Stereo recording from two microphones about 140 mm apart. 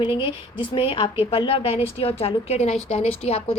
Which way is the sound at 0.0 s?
40° left (ahead or behind).